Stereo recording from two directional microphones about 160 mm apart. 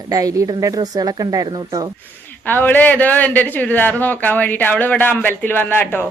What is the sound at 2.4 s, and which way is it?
A man's voice, 10° left (ahead or behind).